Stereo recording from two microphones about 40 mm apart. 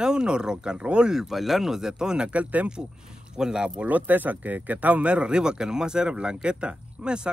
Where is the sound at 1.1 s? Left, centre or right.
Centre.